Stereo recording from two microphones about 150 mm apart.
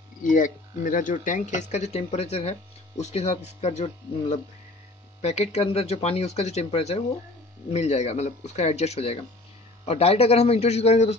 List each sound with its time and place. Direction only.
0.2 s speech: 60° left (ahead or behind); by 11.1 s 45° left (ahead or behind)